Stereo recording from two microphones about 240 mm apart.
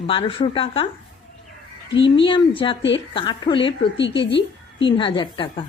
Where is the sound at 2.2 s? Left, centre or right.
Left.